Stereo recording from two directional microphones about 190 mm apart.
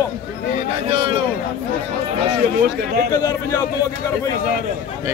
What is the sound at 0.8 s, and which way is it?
Speech, 30° right (ahead or behind).